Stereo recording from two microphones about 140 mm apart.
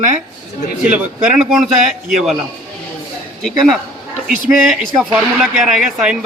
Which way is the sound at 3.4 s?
5° left (ahead or behind).